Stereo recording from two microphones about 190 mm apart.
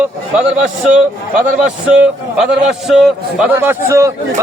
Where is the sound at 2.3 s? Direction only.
5° right (ahead or behind).